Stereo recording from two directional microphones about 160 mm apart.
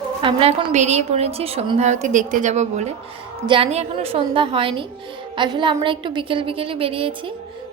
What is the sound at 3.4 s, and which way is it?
Speech, 35° right (ahead or behind).